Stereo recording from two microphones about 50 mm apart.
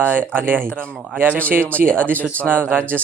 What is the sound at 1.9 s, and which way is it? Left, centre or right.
Speech, right.